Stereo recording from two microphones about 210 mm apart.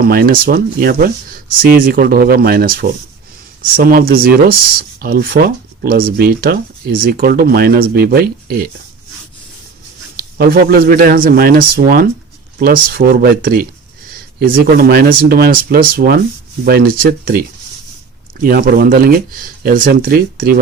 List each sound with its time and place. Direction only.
0.0 s speech: 45° right (ahead or behind)
10.2 s speech: 45° right (ahead or behind)